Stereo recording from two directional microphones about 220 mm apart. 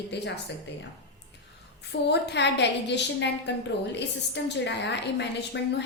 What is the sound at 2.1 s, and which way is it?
A woman's voice, 50° left (ahead or behind).